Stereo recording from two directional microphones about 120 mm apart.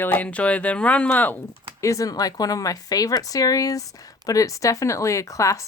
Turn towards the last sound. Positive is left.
turn(degrees=25)  # may be behind; listen again after turning